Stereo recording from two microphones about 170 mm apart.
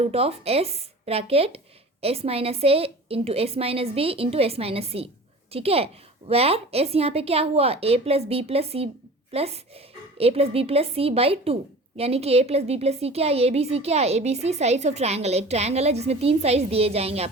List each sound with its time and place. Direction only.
0.0 s a woman's voice: 35° right (ahead or behind)